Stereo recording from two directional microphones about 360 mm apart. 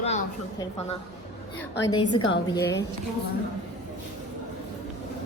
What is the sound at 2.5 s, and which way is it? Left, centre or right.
Speech, centre.